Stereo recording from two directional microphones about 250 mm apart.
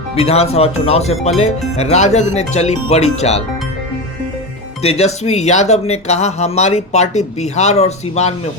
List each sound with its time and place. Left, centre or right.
0.2 s speech: left
4.8 s speech: left